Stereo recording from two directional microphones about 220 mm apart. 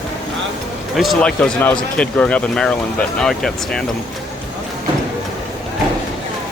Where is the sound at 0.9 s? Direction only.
Centre (ahead or behind).